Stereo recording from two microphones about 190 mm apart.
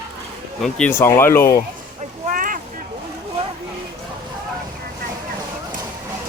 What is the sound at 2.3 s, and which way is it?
Vehicle, 45° right (ahead or behind).